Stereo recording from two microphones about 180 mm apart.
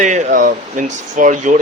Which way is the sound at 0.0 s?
45° right (ahead or behind).